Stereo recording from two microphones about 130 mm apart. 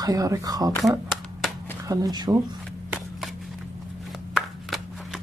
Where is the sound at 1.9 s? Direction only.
30° right (ahead or behind).